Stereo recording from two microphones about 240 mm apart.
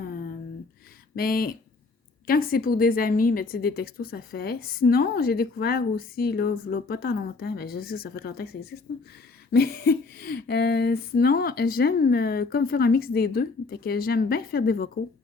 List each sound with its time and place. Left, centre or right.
1.1 s a woman's voice: left